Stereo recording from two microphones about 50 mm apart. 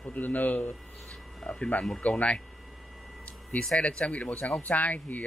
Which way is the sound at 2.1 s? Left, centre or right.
Left.